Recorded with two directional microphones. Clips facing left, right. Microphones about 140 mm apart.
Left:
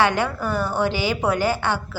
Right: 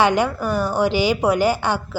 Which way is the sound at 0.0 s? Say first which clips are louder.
Right 3 dB; 15° right (ahead or behind).